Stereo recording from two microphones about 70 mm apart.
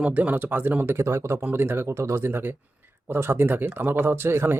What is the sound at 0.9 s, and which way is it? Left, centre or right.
Speech, right.